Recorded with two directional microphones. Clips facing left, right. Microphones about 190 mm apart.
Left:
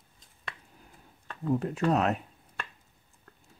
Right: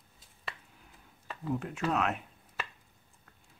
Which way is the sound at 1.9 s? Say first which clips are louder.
Left 5 dB; 35° left (ahead or behind).